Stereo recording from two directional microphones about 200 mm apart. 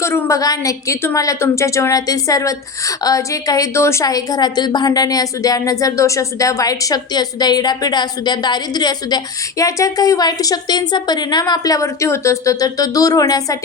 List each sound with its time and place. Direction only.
0.0 s a woman's voice: 15° left (ahead or behind)